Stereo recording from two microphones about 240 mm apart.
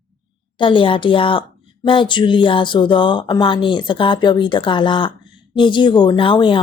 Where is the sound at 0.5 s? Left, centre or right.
Left.